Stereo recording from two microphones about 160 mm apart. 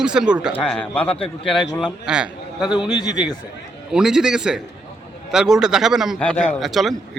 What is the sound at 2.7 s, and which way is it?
Speech, 25° left (ahead or behind).